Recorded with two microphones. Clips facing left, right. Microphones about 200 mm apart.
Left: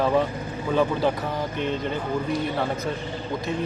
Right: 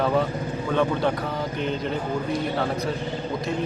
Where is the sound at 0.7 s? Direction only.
5° left (ahead or behind).